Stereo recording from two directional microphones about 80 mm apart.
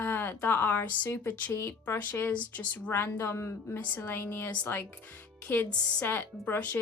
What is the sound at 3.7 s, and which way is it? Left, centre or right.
A woman's voice, left.